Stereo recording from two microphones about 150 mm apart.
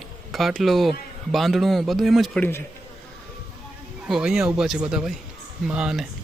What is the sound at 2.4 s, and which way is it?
Speech, 15° left (ahead or behind).